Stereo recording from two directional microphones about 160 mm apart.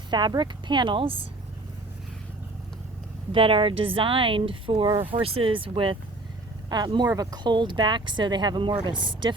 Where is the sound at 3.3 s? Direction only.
35° right (ahead or behind).